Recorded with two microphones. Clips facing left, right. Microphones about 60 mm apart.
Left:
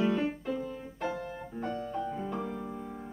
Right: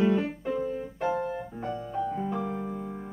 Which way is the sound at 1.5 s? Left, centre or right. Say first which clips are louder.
Left 2 dB; centre.